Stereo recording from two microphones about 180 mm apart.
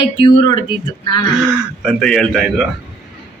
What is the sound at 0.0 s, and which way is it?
Speech, 25° left (ahead or behind).